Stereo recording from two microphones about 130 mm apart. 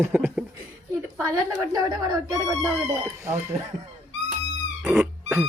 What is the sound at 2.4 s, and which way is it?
Speech, centre (ahead or behind).